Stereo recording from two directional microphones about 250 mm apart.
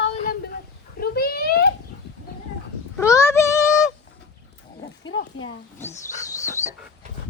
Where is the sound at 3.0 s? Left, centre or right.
Centre.